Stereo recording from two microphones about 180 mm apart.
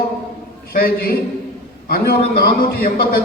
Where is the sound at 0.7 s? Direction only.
55° left (ahead or behind).